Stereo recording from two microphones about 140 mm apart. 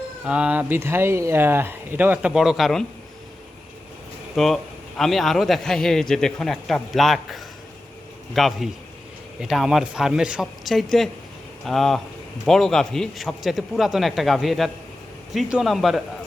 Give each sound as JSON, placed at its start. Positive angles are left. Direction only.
{"t": 0.3, "sound": "speech", "side_deg": -10}
{"t": 4.4, "sound": "a man's voice", "side_deg": 0}